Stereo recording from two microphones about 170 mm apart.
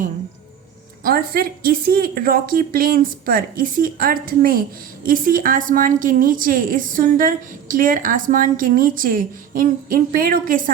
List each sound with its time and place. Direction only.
1.0 s a woman's voice: 60° right (ahead or behind)